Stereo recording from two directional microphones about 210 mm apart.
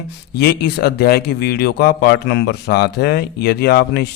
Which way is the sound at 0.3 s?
50° left (ahead or behind).